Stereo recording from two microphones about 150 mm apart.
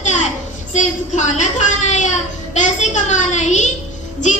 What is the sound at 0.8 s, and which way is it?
A child's voice, 50° left (ahead or behind).